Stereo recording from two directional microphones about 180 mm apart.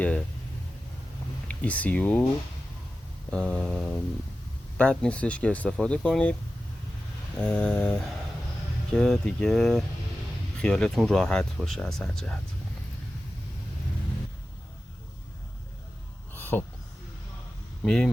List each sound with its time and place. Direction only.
0.0 s speech: 5° left (ahead or behind)
1.5 s speech: 5° left (ahead or behind)
3.2 s speech: 5° left (ahead or behind)
7.3 s speech: 5° left (ahead or behind)
16.3 s a sound: 10° left (ahead or behind)
17.8 s speech: centre (ahead or behind)